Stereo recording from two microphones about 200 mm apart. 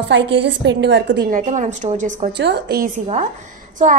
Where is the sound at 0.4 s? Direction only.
60° right (ahead or behind); by 2.3 s 40° right (ahead or behind).